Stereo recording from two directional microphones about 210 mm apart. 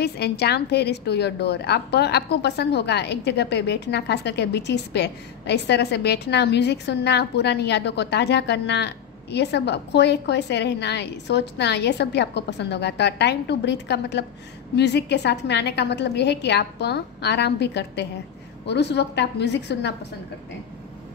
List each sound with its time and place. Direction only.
0.0 s a woman's voice: 50° left (ahead or behind)